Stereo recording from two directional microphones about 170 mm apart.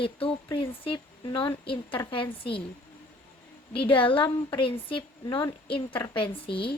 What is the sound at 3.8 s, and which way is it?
Speech, 30° left (ahead or behind).